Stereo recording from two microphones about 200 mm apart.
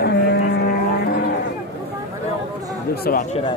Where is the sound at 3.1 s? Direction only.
45° left (ahead or behind).